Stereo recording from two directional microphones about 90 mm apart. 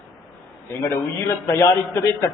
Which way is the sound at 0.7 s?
30° left (ahead or behind).